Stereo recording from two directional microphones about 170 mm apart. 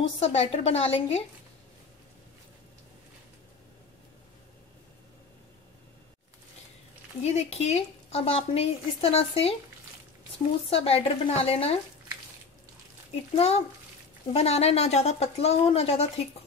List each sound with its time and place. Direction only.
0.2 s a woman's voice: 35° left (ahead or behind)
7.2 s a woman's voice: 40° left (ahead or behind)
10.7 s a woman's voice: 35° left (ahead or behind)
13.1 s a woman's voice: 35° left (ahead or behind)